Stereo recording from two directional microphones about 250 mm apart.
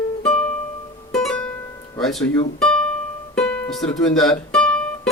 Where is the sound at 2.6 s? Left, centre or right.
Centre.